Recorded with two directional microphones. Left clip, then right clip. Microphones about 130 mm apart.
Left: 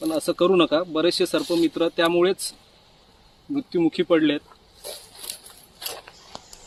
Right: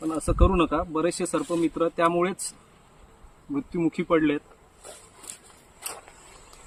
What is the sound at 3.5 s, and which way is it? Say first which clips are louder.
Speech: left 5 dB; 20° right (ahead or behind).